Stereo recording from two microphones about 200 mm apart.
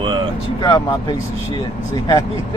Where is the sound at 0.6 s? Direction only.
20° left (ahead or behind).